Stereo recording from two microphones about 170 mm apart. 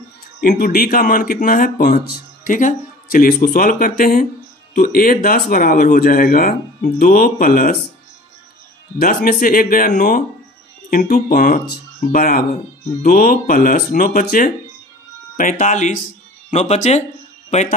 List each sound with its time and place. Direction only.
0.4 s speech: 60° left (ahead or behind)
8.9 s speech: 60° left (ahead or behind); by 17.7 s 45° left (ahead or behind)